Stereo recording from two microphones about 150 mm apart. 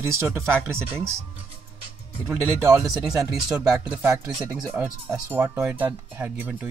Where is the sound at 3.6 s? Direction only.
5° right (ahead or behind).